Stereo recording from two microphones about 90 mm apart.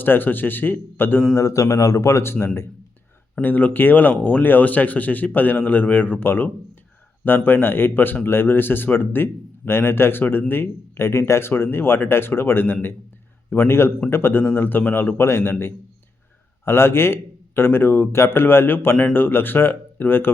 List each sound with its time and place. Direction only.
0.0 s speech: 20° left (ahead or behind)
1.3 s speech: 35° left (ahead or behind)